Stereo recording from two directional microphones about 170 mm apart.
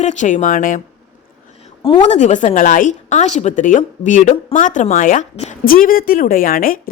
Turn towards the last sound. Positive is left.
turn(degrees=55)  # may be behind; listen again after turning